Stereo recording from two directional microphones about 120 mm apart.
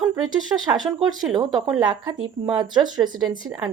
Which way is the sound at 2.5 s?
35° right (ahead or behind).